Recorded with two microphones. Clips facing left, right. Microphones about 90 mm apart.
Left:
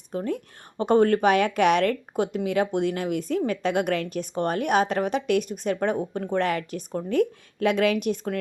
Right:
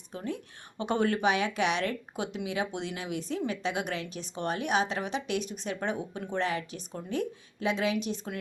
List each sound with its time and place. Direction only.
0.1 s a woman's voice: 45° left (ahead or behind)